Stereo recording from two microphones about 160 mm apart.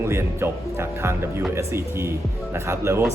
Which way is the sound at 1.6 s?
15° right (ahead or behind).